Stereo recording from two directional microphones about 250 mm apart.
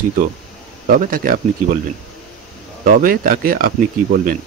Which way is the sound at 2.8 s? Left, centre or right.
Right.